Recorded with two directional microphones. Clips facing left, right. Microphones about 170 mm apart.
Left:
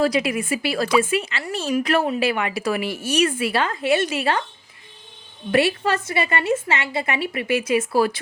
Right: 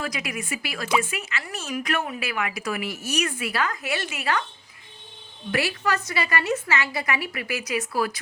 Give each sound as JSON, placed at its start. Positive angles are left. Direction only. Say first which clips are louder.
{"t": 0.0, "sound": "speech", "louder": "left 11 dB", "side_deg": 30}
{"t": 5.5, "sound": "speech", "louder": "left 6 dB", "side_deg": 30}